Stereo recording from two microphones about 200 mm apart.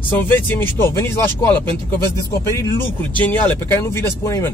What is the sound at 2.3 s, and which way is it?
Speech, 15° left (ahead or behind).